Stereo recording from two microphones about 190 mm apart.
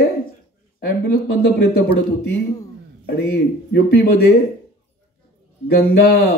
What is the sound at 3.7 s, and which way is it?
Speech, 60° left (ahead or behind).